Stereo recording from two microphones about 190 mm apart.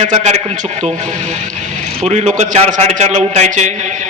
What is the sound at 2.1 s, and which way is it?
A man's voice, 35° right (ahead or behind).